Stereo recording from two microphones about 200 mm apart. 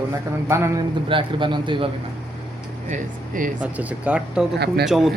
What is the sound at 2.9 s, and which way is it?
Speech, 40° right (ahead or behind).